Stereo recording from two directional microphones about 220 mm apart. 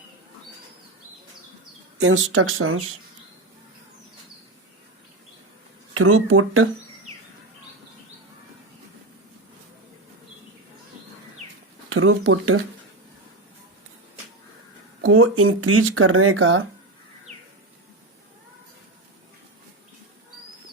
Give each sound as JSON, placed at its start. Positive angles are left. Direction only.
{"t": 2.0, "sound": "speech", "side_deg": -60}
{"t": 5.9, "sound": "speech", "side_deg": -75}
{"t": 11.9, "sound": "speech", "side_deg": -70}
{"t": 15.0, "sound": "speech", "side_deg": -70}